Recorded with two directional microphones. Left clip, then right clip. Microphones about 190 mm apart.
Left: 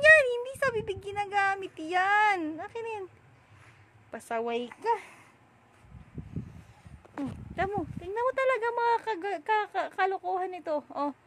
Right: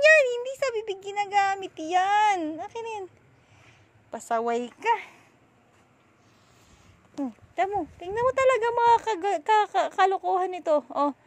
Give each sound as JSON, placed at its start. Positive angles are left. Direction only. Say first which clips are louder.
{"t": 0.0, "sound": "a sound", "louder": "right 1 dB", "side_deg": -10}
{"t": 4.1, "sound": "speech", "louder": "right 5 dB", "side_deg": -15}
{"t": 7.5, "sound": "speech", "louder": "right 5 dB", "side_deg": -10}